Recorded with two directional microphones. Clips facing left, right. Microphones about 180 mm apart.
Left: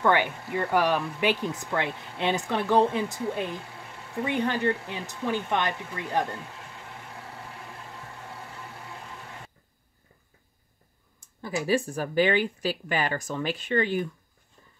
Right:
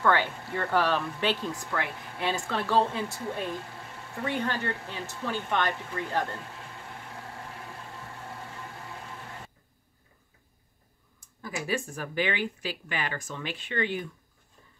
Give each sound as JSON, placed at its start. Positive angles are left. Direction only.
{"t": 0.0, "sound": "speech", "side_deg": 15}
{"t": 11.1, "sound": "speech", "side_deg": 25}